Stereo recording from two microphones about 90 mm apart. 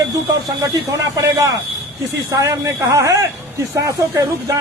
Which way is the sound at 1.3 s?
35° right (ahead or behind).